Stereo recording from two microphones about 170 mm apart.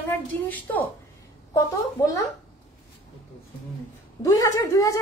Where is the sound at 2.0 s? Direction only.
20° left (ahead or behind).